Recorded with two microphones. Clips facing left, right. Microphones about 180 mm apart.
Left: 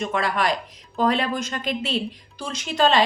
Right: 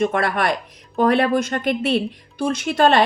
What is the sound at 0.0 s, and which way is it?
A woman's voice, 55° right (ahead or behind).